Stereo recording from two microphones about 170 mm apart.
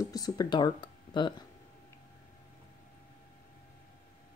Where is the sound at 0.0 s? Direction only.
20° left (ahead or behind).